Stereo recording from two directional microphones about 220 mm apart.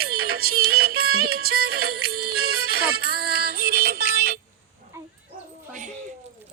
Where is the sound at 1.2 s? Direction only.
45° right (ahead or behind).